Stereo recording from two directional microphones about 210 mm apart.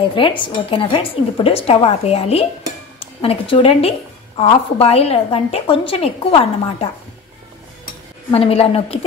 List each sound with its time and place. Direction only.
0.1 s a woman's voice: 25° left (ahead or behind)
8.3 s a woman's voice: 30° left (ahead or behind)